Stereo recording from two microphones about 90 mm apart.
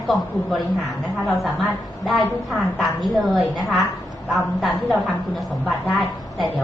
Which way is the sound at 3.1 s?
Centre (ahead or behind).